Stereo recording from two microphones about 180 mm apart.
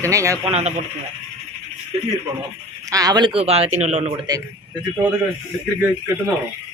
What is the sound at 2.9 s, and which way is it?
A man's voice, 20° right (ahead or behind).